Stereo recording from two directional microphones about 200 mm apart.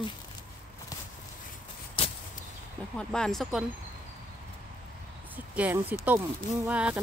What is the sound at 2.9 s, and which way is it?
Speech, 5° left (ahead or behind).